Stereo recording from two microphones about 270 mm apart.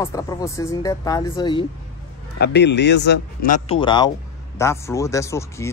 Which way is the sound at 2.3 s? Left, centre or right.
Left.